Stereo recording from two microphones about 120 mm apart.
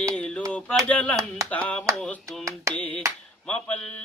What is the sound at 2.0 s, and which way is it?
Hands, 5° left (ahead or behind).